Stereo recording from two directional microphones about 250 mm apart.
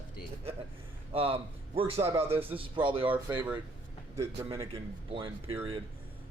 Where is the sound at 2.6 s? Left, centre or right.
Centre.